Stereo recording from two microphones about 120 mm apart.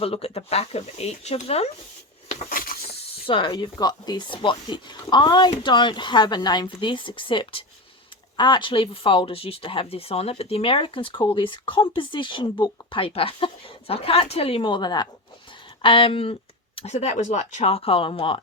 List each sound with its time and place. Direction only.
0.0 s speech: 55° left (ahead or behind)
3.1 s speech: 45° left (ahead or behind)
16.9 s speech: 70° left (ahead or behind); by 18.3 s 45° left (ahead or behind)